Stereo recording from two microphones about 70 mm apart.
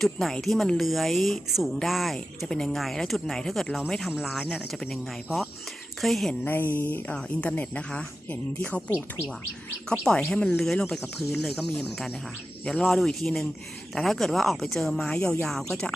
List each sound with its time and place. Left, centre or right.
0.0 s speech: centre
6.4 s speech: left
7.1 s speech: centre
10.0 s speech: centre